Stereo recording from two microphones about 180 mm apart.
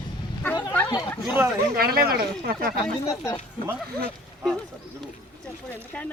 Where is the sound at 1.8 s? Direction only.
55° right (ahead or behind).